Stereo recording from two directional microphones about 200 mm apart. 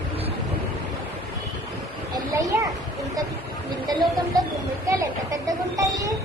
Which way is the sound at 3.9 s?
20° right (ahead or behind).